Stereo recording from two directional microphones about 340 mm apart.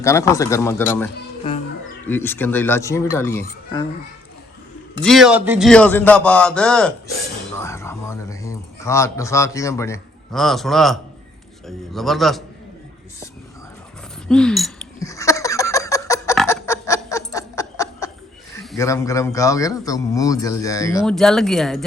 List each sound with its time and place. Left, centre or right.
0.0 s a man's voice: centre
5.0 s speech: centre
7.5 s a sound: centre
11.9 s speech: centre
14.3 s fowl: centre
16.3 s snicker: centre
18.6 s a man's voice: centre